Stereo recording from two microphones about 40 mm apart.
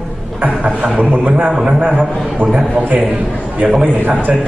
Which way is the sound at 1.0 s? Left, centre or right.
Right.